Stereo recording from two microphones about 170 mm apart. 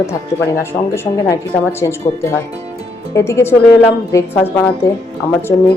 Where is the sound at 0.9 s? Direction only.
15° left (ahead or behind).